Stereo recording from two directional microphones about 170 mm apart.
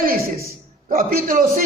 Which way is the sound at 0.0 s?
60° right (ahead or behind).